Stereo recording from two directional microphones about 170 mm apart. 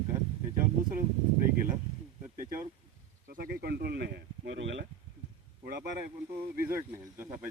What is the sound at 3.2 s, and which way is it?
A man's voice, 60° right (ahead or behind).